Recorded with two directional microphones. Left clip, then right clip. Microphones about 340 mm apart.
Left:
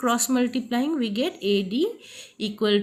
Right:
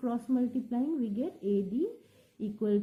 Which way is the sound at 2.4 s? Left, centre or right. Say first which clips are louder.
Left 9 dB; centre.